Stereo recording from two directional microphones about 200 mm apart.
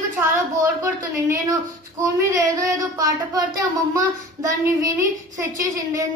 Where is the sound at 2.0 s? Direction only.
15° right (ahead or behind).